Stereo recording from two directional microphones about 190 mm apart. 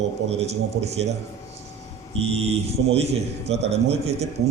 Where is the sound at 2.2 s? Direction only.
35° right (ahead or behind).